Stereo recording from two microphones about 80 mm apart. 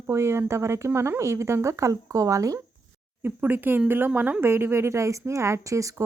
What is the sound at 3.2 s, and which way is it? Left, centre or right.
Speech, right.